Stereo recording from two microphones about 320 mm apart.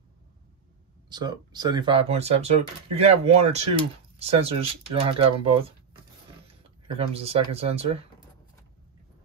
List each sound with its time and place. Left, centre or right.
1.0 s speech: centre
7.0 s speech: centre